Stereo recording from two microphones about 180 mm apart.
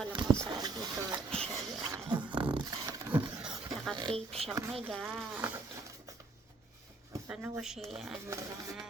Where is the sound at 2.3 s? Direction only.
25° right (ahead or behind); by 3.6 s 5° right (ahead or behind).